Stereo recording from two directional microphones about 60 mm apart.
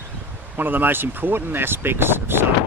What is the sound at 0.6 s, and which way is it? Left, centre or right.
Speech, right.